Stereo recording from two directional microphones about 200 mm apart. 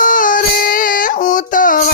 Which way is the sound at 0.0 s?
40° left (ahead or behind).